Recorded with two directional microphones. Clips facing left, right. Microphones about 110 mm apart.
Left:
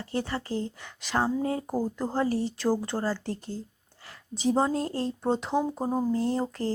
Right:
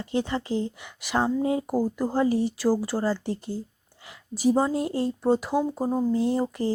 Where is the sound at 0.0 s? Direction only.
20° right (ahead or behind).